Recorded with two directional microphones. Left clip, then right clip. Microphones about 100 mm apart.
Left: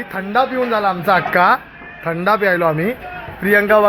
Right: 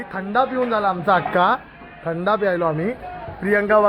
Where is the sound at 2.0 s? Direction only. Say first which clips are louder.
Left 4 dB; centre (ahead or behind).